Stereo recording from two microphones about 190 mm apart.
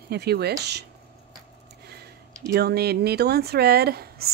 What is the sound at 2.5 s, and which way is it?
Speech, 55° right (ahead or behind).